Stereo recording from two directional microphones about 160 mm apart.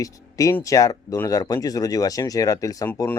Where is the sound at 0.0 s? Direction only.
20° left (ahead or behind).